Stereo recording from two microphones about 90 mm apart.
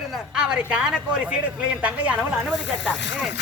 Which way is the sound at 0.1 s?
5° right (ahead or behind).